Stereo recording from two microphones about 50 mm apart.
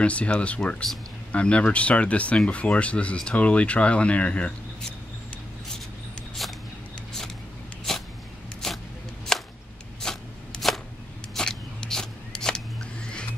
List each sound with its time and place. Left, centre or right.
0.0 s speech: left
7.9 s a sound: centre
9.3 s whip: centre
10.0 s shuffling cards: centre
10.6 s chopping: centre
11.3 s a sound: centre